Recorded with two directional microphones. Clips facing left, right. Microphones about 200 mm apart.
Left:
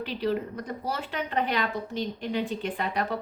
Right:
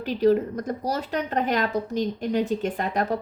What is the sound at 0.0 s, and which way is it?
Speech, 45° right (ahead or behind).